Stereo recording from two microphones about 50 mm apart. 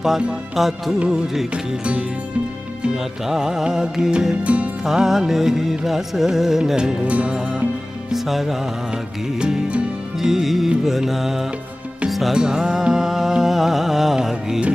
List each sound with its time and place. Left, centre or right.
0.6 s music: centre
3.0 s music: centre
4.4 s music: right
4.8 s music: centre
7.1 s music: right
8.1 s music: centre
8.9 s music: centre
10.1 s music: centre
12.4 s music: centre
12.9 s music: centre